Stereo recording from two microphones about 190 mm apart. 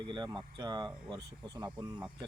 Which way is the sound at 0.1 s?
20° right (ahead or behind).